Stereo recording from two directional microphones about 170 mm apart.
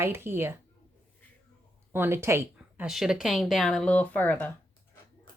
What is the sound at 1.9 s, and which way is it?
Speech, 15° right (ahead or behind).